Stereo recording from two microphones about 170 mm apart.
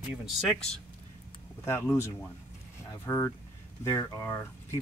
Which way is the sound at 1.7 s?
15° left (ahead or behind).